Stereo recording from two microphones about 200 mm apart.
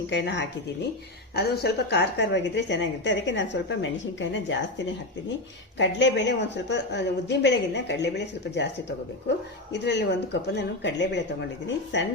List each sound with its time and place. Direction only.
0.1 s a woman's voice: 60° left (ahead or behind)
5.7 s a woman's voice: 60° left (ahead or behind)
9.7 s a woman's voice: 60° left (ahead or behind)